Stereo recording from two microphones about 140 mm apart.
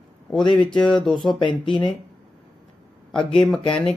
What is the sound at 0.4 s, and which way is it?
Speech, 35° left (ahead or behind).